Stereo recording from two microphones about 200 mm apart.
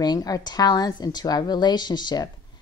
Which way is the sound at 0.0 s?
20° left (ahead or behind).